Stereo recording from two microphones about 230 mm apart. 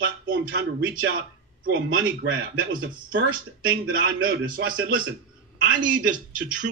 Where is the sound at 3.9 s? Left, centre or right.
Right.